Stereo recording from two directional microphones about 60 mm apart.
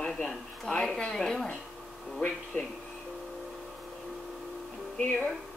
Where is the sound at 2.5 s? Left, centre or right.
Left.